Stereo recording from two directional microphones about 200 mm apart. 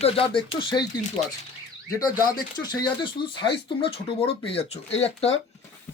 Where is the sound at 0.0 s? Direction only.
25° left (ahead or behind).